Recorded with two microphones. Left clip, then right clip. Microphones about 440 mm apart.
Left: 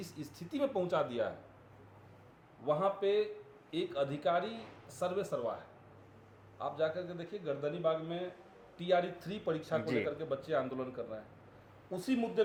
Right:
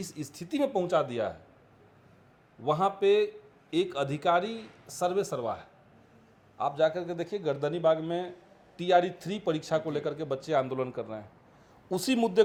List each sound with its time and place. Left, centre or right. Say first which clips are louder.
0.0 s speech: right 6 dB; right
2.6 s speech: right 7 dB; right